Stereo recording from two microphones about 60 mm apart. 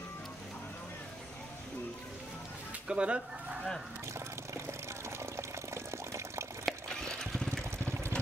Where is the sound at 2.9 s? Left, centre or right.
Centre.